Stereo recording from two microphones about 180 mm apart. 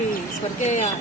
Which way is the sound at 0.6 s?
40° left (ahead or behind).